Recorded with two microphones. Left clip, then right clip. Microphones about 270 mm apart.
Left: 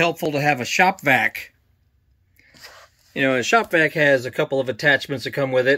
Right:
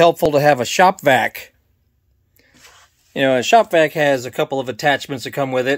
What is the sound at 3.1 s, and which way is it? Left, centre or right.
Speech, centre.